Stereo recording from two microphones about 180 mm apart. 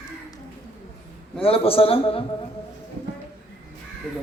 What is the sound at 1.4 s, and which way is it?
Speech, 30° left (ahead or behind).